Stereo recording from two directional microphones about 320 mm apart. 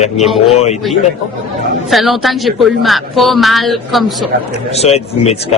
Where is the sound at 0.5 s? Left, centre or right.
Centre.